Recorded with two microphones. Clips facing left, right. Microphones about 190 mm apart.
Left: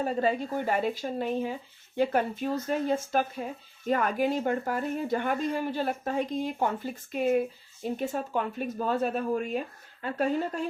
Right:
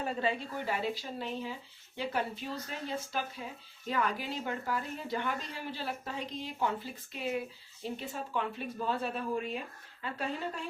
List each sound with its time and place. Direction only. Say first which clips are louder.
0.0 s speech: left 6 dB; 45° left (ahead or behind)